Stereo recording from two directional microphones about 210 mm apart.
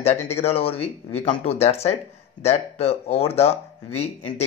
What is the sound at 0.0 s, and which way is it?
Speech, 30° left (ahead or behind).